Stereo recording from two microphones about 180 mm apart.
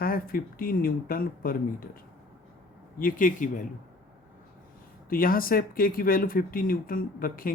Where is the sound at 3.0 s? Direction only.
50° left (ahead or behind).